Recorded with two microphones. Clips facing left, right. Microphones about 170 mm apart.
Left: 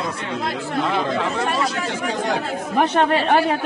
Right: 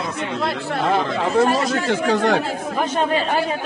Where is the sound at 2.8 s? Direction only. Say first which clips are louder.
Left 3 dB; 65° left (ahead or behind).